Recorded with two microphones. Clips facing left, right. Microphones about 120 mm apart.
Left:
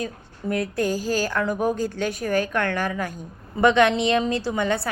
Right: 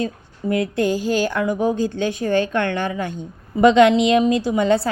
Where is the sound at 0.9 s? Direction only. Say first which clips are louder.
Right 4 dB; 40° left (ahead or behind).